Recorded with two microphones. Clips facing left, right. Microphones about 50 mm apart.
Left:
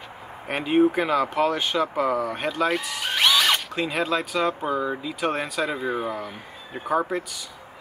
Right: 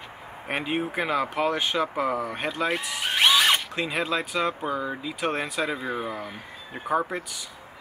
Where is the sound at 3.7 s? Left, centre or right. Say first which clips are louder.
Left 2 dB; centre.